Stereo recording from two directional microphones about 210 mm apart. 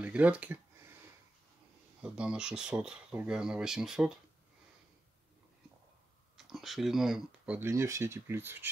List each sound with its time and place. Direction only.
0.0 s a sound: 5° right (ahead or behind)
2.0 s speech: 5° right (ahead or behind)
6.3 s speech: centre (ahead or behind)